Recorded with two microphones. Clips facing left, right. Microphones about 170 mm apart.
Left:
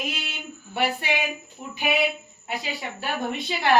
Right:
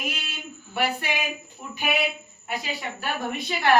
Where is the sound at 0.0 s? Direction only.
20° left (ahead or behind).